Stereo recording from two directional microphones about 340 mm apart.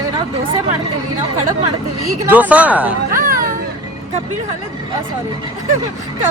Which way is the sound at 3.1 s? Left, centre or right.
Right.